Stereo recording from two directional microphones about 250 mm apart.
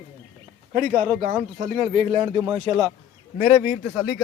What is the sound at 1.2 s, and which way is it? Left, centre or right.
Speech, right.